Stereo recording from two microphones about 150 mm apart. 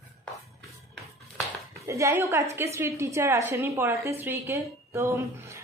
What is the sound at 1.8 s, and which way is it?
A woman's voice, 20° right (ahead or behind).